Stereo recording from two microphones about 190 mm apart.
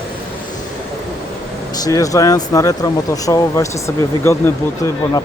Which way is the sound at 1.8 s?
15° left (ahead or behind).